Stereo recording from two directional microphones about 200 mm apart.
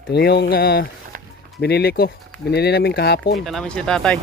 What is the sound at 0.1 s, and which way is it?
Speech, 55° left (ahead or behind).